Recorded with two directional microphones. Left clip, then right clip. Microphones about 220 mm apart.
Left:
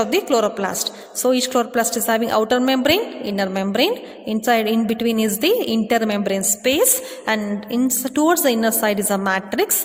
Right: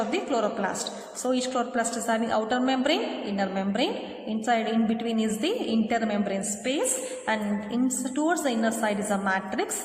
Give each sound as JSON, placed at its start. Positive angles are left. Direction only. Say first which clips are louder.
{"t": 0.0, "sound": "a woman's voice", "louder": "left 9 dB", "side_deg": 45}